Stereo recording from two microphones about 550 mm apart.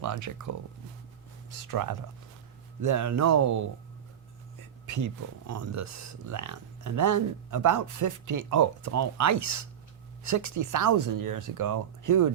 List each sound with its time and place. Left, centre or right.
0.0 s speech: right
1.6 s speech: right
4.9 s speech: right